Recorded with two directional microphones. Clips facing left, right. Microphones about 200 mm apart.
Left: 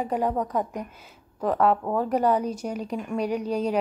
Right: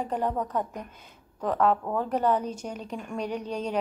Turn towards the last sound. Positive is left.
turn(degrees=10)  # may be behind; listen again after turning